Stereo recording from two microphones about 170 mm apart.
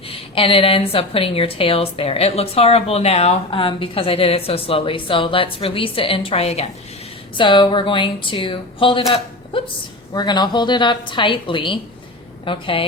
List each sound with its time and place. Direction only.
0.1 s a woman's voice: 30° left (ahead or behind)
10.2 s a woman's voice: 25° left (ahead or behind)